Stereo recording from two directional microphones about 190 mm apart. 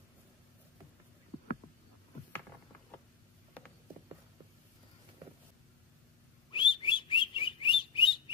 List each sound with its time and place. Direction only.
6.5 s bird: 25° left (ahead or behind)